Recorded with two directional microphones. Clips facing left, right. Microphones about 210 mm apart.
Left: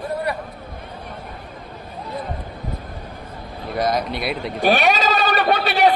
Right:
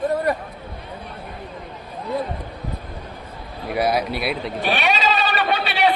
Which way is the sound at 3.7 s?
10° right (ahead or behind).